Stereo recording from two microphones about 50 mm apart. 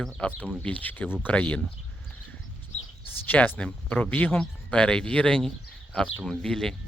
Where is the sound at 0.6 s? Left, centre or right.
Left.